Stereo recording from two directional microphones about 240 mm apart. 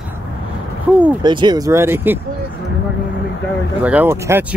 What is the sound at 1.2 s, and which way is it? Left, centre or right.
Speech, centre.